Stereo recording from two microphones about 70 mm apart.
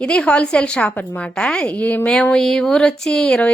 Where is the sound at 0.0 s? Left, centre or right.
Centre.